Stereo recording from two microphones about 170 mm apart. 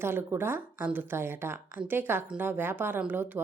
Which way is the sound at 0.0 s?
15° right (ahead or behind).